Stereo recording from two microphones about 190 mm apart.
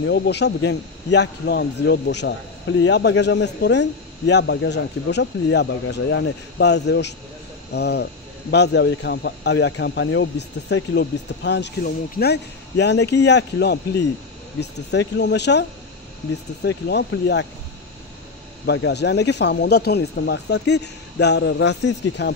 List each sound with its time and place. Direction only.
0.0 s a man's voice: 60° left (ahead or behind)
16.6 s a man's voice: 65° left (ahead or behind)
18.7 s a man's voice: 65° left (ahead or behind)